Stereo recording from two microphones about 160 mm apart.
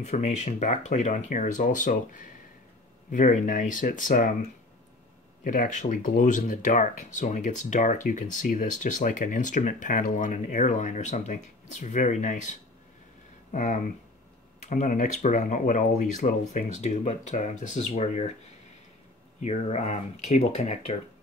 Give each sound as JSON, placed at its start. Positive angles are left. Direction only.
{"t": 0.0, "sound": "speech", "side_deg": 45}
{"t": 5.4, "sound": "speech", "side_deg": 55}
{"t": 19.4, "sound": "speech", "side_deg": 45}